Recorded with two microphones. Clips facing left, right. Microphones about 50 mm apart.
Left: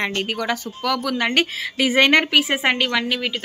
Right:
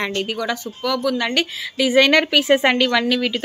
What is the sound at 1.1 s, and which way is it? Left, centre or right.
A woman's voice, left.